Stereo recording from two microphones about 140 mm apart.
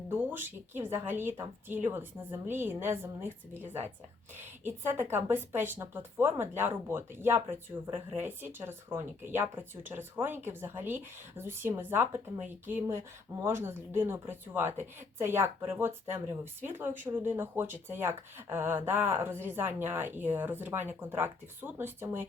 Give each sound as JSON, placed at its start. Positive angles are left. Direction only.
{"t": 0.1, "sound": "speech", "side_deg": -15}